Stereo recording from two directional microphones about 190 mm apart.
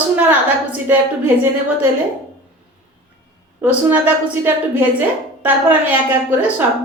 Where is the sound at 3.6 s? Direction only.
10° right (ahead or behind).